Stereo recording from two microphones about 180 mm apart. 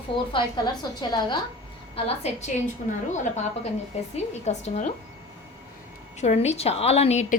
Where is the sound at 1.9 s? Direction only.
40° left (ahead or behind).